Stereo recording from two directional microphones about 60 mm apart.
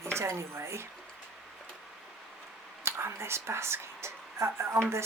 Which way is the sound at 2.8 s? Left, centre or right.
Right.